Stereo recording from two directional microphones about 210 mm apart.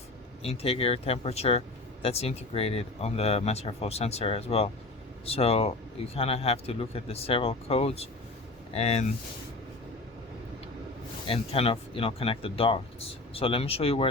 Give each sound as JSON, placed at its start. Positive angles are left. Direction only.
{"t": 0.4, "sound": "speech", "side_deg": 30}
{"t": 11.3, "sound": "speech", "side_deg": 25}